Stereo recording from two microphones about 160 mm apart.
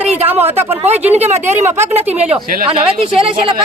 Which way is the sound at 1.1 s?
45° right (ahead or behind).